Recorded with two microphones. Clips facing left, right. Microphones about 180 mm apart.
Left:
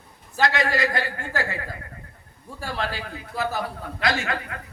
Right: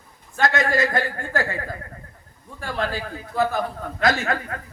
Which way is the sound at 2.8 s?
45° right (ahead or behind).